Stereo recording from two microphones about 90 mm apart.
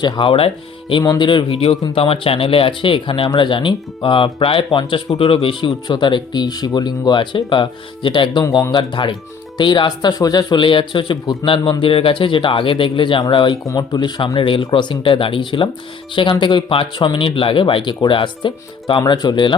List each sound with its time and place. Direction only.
0.0 s speech: 70° left (ahead or behind)
1.2 s speech: 60° left (ahead or behind)
11.8 s speech: 90° left; by 13.6 s 65° left (ahead or behind)
13.7 s speech: 55° left (ahead or behind)
14.3 s speech: 70° left (ahead or behind); by 19.5 s 55° left (ahead or behind)